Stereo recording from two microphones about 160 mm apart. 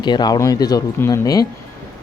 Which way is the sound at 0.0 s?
25° left (ahead or behind).